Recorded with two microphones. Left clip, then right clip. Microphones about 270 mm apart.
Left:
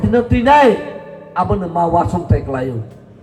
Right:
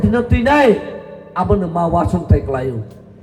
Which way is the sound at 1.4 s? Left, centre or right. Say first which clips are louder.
Even; right.